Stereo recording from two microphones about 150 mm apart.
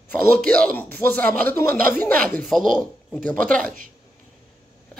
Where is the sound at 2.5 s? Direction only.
Centre (ahead or behind).